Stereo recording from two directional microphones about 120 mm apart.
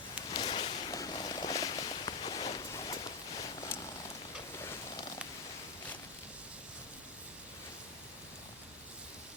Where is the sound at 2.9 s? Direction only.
35° left (ahead or behind).